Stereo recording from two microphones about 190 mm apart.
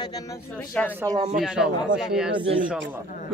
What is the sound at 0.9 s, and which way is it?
Speech, 15° right (ahead or behind).